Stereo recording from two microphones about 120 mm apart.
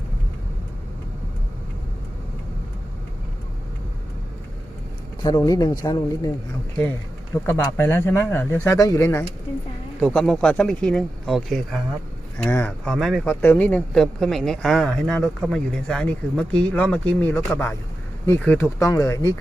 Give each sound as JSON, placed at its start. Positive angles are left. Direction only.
{"t": 5.4, "sound": "speech", "side_deg": 30}
{"t": 7.4, "sound": "speech", "side_deg": 20}
{"t": 10.0, "sound": "speech", "side_deg": 5}
{"t": 12.4, "sound": "speech", "side_deg": 15}
{"t": 12.8, "sound": "speech", "side_deg": 5}
{"t": 13.2, "sound": "speech", "side_deg": 15}